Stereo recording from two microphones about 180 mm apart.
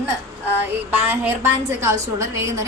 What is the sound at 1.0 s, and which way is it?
A woman's voice, 10° right (ahead or behind).